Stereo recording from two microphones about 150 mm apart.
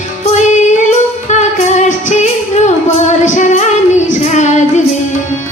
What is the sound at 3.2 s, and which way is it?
Female singing, 55° left (ahead or behind).